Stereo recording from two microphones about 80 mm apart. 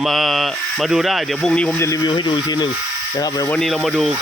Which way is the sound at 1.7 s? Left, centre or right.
Left.